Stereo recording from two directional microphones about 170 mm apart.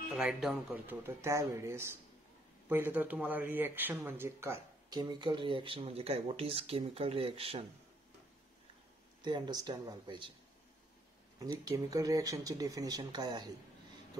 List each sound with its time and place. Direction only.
0.1 s speech: 5° right (ahead or behind); by 7.6 s 35° right (ahead or behind)
9.2 s speech: 25° right (ahead or behind)
11.3 s speech: 20° right (ahead or behind)